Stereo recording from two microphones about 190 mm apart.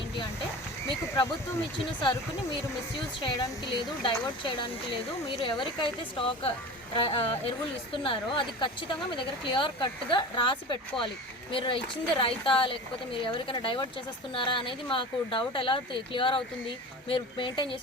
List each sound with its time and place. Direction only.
1.0 s speech: 15° left (ahead or behind)
3.2 s speech: 20° left (ahead or behind)